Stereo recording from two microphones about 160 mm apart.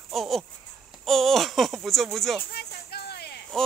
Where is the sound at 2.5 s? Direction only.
80° left.